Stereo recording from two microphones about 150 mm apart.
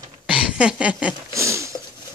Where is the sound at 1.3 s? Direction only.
20° right (ahead or behind).